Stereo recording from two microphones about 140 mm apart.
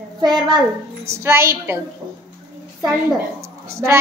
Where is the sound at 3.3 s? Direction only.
20° right (ahead or behind).